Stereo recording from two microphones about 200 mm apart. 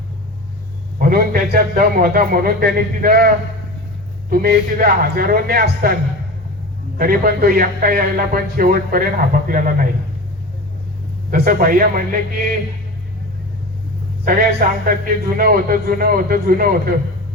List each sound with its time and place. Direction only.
0.9 s a man's voice: 45° right (ahead or behind)
7.0 s a man's voice: 50° right (ahead or behind)
11.3 s a man's voice: 45° right (ahead or behind)
14.3 s a man's voice: 45° right (ahead or behind)